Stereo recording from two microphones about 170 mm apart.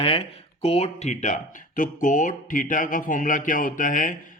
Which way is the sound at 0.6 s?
35° left (ahead or behind).